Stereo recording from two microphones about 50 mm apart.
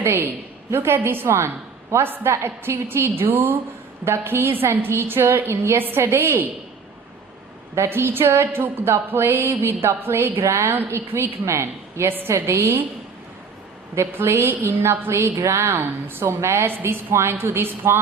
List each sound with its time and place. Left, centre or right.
0.0 s a woman's voice: right
4.0 s a woman's voice: right
5.5 s a woman's voice: right
7.8 s a woman's voice: right
12.3 s a woman's voice: right
14.1 s a woman's voice: right